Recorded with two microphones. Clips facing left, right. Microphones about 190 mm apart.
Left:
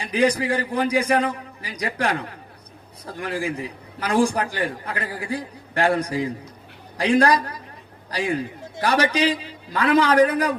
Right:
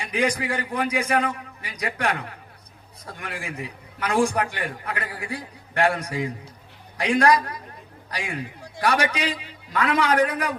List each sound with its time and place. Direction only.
0.0 s a man's voice: 35° left (ahead or behind)